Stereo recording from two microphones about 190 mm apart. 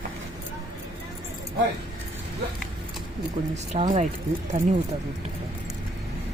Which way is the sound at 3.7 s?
35° right (ahead or behind).